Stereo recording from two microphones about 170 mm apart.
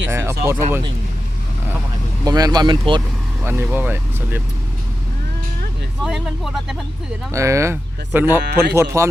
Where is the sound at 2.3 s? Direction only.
25° right (ahead or behind).